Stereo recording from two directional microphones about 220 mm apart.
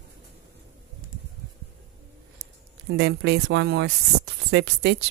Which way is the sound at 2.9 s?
50° right (ahead or behind).